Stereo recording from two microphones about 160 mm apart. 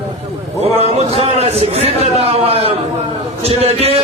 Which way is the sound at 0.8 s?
40° right (ahead or behind).